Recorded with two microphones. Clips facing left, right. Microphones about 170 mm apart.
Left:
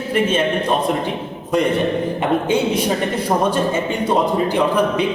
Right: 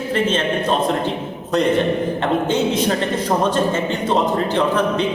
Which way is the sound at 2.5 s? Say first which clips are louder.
Even; 10° left (ahead or behind).